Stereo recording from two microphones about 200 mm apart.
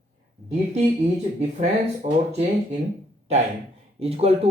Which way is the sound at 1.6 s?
35° right (ahead or behind).